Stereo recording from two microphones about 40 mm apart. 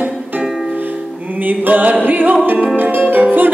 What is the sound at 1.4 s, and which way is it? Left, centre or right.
Music, right.